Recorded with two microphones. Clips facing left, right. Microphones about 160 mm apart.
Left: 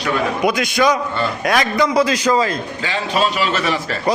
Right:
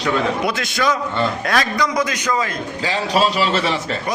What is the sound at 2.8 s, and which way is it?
Speech, 35° right (ahead or behind).